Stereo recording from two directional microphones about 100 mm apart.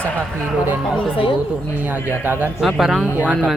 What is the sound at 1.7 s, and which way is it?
Speech, 15° right (ahead or behind).